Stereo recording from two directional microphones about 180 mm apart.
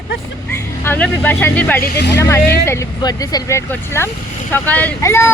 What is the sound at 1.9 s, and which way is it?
Speech, 70° left (ahead or behind).